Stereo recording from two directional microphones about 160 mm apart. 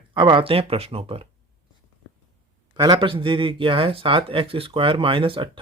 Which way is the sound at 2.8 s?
30° right (ahead or behind).